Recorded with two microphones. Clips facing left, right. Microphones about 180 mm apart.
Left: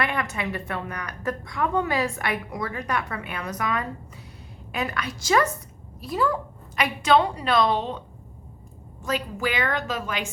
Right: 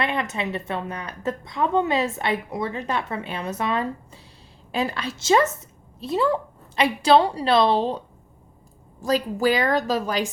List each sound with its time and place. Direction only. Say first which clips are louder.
0.0 s a woman's voice: right 2 dB; 25° right (ahead or behind)